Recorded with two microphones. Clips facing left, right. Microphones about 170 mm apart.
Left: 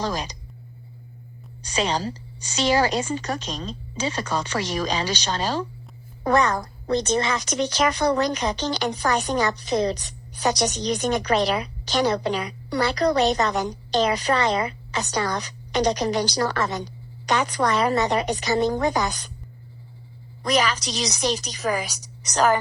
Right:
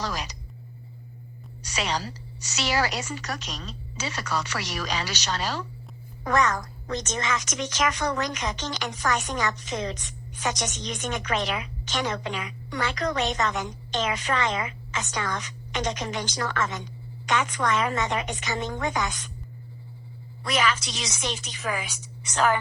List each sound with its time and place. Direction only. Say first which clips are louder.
0.0 s speech: left 5 dB; 30° left (ahead or behind)
1.6 s a woman's voice: left 5 dB; 30° left (ahead or behind)
20.4 s a woman's voice: left 4 dB; 35° left (ahead or behind)